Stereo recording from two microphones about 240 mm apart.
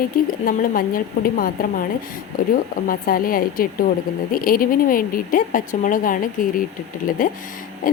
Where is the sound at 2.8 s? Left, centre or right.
Left.